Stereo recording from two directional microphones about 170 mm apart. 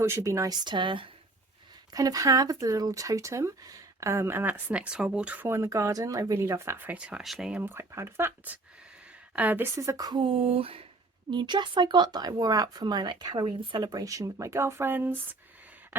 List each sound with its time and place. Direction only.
0.0 s speech: 15° right (ahead or behind)